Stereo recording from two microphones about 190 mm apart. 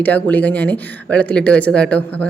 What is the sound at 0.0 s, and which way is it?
Speech, 10° left (ahead or behind).